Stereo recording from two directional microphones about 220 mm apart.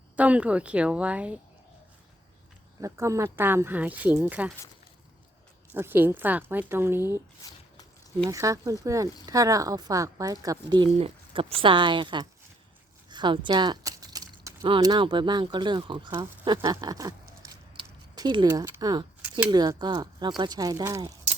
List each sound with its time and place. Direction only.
0.2 s speech: 5° right (ahead or behind)
2.8 s speech: 15° right (ahead or behind)
5.7 s speech: 10° right (ahead or behind)
7.4 s speech: 15° left (ahead or behind)
8.2 s speech: 15° right (ahead or behind)